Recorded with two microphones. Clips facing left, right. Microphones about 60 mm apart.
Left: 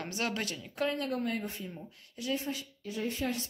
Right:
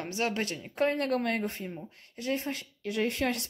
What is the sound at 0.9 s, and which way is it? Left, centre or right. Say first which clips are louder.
Speech: right 4 dB; right.